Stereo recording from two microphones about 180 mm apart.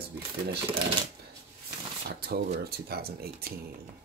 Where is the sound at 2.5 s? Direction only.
60° right (ahead or behind).